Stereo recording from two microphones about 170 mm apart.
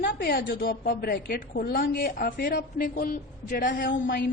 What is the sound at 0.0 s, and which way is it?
A woman's voice, 60° left (ahead or behind).